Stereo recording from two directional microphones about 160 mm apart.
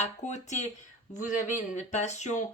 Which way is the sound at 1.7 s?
45° left (ahead or behind).